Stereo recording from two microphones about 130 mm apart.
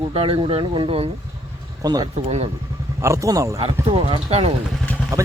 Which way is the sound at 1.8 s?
30° right (ahead or behind).